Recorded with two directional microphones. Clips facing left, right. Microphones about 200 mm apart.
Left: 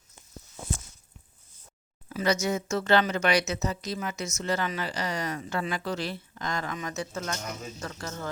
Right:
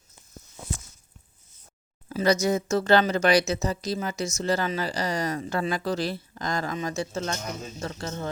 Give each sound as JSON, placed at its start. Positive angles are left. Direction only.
{"t": 2.0, "sound": "speech", "side_deg": -35}